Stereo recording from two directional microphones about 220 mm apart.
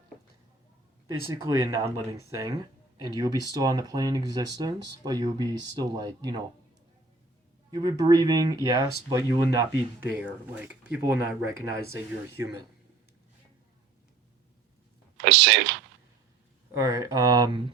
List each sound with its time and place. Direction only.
1.3 s speech: 10° right (ahead or behind)
7.7 s speech: 15° right (ahead or behind)
15.2 s speech: 55° right (ahead or behind)
16.7 s speech: 15° right (ahead or behind)